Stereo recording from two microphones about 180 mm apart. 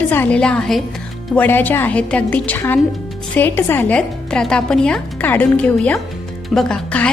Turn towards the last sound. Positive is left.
turn(degrees=5)  # may be behind; listen again after turning